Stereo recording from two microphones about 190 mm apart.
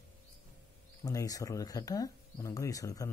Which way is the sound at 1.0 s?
20° left (ahead or behind).